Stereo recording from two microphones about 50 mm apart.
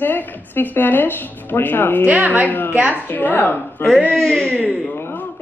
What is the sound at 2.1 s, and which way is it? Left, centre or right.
Speech, right.